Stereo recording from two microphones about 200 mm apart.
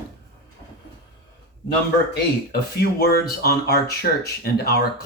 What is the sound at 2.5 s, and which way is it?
Speech, 50° left (ahead or behind).